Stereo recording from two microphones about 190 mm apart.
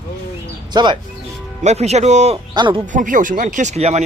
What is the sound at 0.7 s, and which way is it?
Speech, 25° right (ahead or behind).